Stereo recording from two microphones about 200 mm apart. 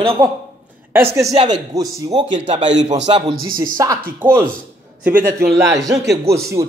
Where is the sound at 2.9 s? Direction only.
30° right (ahead or behind).